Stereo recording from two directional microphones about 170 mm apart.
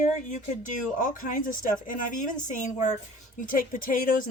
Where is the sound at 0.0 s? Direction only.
45° left (ahead or behind).